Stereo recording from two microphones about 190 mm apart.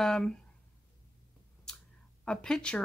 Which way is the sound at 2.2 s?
5° left (ahead or behind).